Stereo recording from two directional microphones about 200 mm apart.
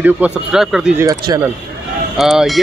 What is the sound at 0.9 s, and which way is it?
Speech, 15° right (ahead or behind).